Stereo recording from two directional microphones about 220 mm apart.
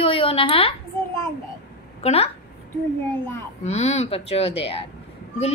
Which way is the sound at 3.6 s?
30° left (ahead or behind).